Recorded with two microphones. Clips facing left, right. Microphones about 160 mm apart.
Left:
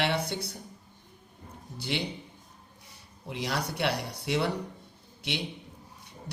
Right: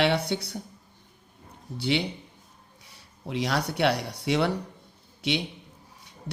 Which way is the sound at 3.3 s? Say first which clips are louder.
Right 5 dB; 70° right (ahead or behind).